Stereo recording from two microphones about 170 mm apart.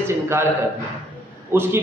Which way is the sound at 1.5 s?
15° right (ahead or behind).